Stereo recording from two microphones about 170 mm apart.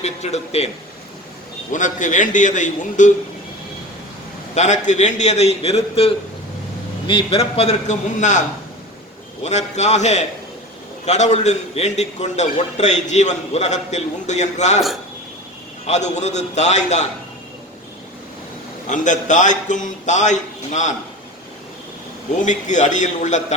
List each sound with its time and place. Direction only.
0.0 s a man's voice: 40° left (ahead or behind)
1.7 s a man's voice: 50° left (ahead or behind)
4.5 s a man's voice: 45° left (ahead or behind)
9.4 s a man's voice: 40° left (ahead or behind)
15.9 s a man's voice: 40° left (ahead or behind)
18.9 s a man's voice: 45° left (ahead or behind)
22.4 s a man's voice: 45° left (ahead or behind)